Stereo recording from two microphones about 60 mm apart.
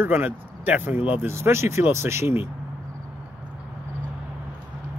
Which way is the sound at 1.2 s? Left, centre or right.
Right.